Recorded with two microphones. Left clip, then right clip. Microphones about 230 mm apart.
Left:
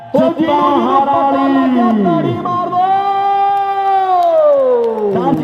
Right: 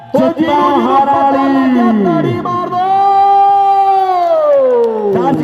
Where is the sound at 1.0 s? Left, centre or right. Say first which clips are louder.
Right 2 dB; right.